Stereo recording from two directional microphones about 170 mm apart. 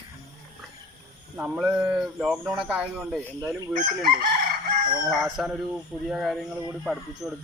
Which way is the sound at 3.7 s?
50° right (ahead or behind).